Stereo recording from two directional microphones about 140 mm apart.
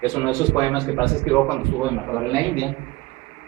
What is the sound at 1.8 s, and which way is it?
Speech, 5° left (ahead or behind).